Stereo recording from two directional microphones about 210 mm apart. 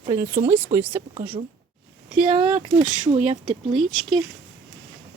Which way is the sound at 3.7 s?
Centre (ahead or behind).